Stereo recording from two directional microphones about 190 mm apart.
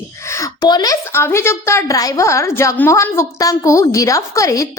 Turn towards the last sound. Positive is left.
turn(degrees=15)  # may be behind; listen again after turning